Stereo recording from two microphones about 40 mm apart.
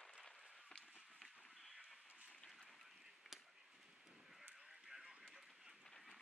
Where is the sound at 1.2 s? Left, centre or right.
Centre.